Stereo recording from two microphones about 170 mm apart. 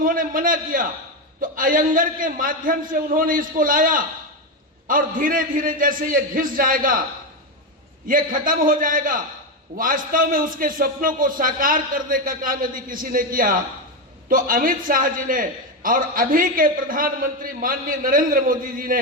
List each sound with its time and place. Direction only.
0.0 s a man's voice: 55° right (ahead or behind)
8.0 s a man's voice: 55° right (ahead or behind)